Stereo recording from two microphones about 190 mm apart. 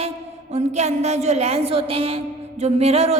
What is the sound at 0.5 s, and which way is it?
A woman's voice, 35° right (ahead or behind).